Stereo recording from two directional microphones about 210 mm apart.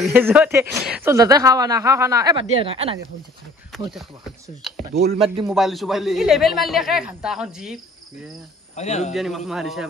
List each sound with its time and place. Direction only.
0.0 s speech: 10° right (ahead or behind); by 3.0 s 25° right (ahead or behind)
3.7 s speech: centre (ahead or behind)
5.1 s a man's voice: 25° right (ahead or behind)
5.5 s a woman's voice: centre (ahead or behind)
8.7 s speech: 35° left (ahead or behind)
9.1 s a woman's voice: centre (ahead or behind)